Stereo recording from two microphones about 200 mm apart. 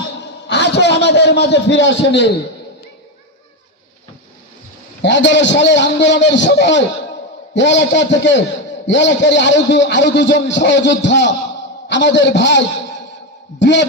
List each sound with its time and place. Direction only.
0.4 s a man's voice: 60° left (ahead or behind)
5.0 s a man's voice: 65° left (ahead or behind)